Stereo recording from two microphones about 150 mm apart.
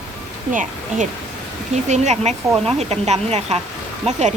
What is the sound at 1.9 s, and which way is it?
A woman's voice, 50° right (ahead or behind).